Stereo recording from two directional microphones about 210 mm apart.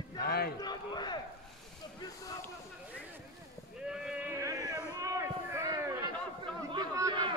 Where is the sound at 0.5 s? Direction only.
20° left (ahead or behind).